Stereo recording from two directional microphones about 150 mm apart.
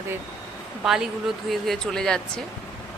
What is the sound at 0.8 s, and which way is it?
Speech, 5° right (ahead or behind).